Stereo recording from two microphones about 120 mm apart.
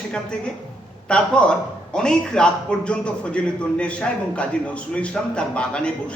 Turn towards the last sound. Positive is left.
turn(degrees=10)  # may be behind; listen again after turning